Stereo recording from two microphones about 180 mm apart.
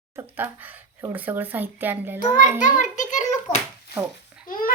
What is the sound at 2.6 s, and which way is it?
Speech, 45° left (ahead or behind).